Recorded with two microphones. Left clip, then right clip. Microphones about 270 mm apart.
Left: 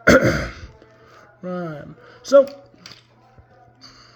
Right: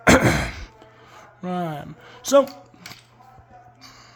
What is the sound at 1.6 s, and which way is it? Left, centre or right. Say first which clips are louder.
Speech: right 2 dB; centre.